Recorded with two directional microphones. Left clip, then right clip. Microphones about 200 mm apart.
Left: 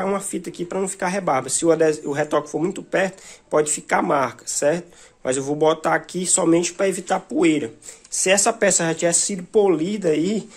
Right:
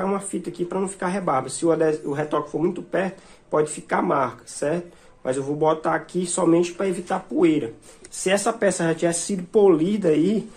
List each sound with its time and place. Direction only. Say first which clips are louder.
0.0 s speech: left 2 dB; 35° left (ahead or behind)
9.5 s speech: right 1 dB; 20° left (ahead or behind)